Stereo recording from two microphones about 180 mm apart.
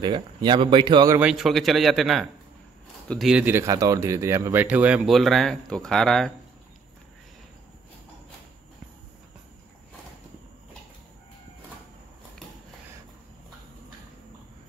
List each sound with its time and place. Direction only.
0.0 s speech: 25° right (ahead or behind)
1.2 s speech: centre (ahead or behind)